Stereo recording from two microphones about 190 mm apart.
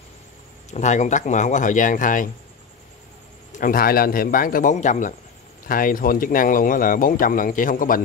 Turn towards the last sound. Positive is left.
turn(degrees=45)  # may be behind; listen again after turning